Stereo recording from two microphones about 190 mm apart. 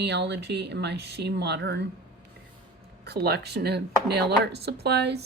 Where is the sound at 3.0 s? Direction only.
60° right (ahead or behind).